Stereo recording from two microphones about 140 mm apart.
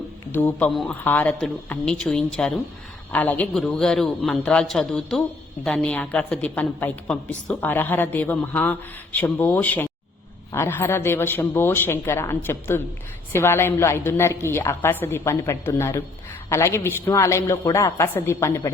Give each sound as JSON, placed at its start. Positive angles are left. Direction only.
{"t": 0.3, "sound": "speech", "side_deg": 15}
{"t": 0.7, "sound": "a man's voice", "side_deg": 0}
{"t": 1.0, "sound": "a woman's voice", "side_deg": 10}